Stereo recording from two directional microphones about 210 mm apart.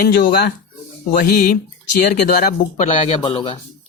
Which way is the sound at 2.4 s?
35° left (ahead or behind).